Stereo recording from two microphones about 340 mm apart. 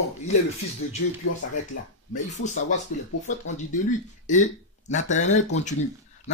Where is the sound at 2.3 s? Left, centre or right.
Left.